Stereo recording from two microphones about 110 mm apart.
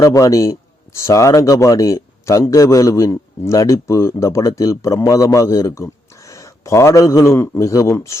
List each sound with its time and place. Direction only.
0.0 s speech: 30° left (ahead or behind)